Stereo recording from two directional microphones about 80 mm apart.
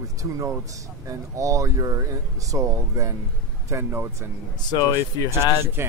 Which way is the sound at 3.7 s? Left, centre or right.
Right.